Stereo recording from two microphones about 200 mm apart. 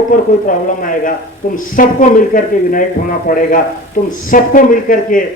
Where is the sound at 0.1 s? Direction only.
40° left (ahead or behind).